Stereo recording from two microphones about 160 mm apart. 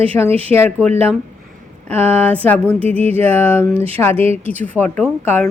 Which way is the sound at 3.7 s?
40° right (ahead or behind).